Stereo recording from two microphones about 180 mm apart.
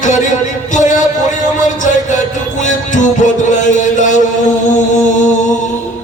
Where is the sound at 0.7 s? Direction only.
45° left (ahead or behind).